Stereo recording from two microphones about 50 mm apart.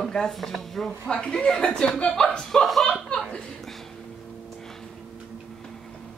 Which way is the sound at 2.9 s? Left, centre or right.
Centre.